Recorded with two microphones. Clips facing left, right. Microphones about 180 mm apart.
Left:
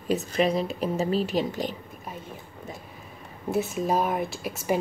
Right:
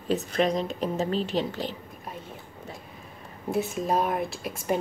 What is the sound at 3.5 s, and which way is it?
A woman's voice, centre (ahead or behind).